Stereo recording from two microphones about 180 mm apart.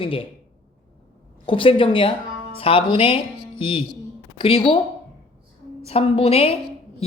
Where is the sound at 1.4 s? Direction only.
30° left (ahead or behind).